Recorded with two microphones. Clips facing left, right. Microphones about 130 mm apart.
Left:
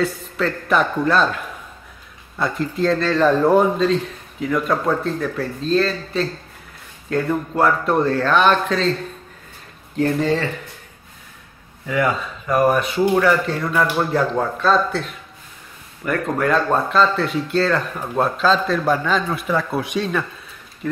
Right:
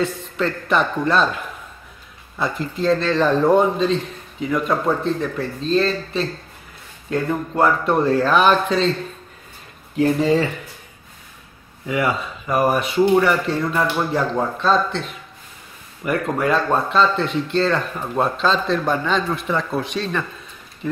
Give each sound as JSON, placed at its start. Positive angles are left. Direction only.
{"t": 0.0, "sound": "speech", "side_deg": 0}
{"t": 9.9, "sound": "speech", "side_deg": -5}
{"t": 11.9, "sound": "speech", "side_deg": -5}
{"t": 20.8, "sound": "speech", "side_deg": -5}